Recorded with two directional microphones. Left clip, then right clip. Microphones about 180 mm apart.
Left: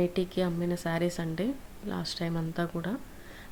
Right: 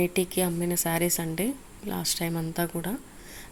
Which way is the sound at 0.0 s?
15° right (ahead or behind).